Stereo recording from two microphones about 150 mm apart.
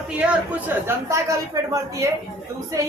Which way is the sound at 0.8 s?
20° right (ahead or behind).